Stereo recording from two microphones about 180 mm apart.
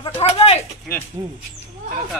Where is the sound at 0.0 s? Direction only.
35° left (ahead or behind).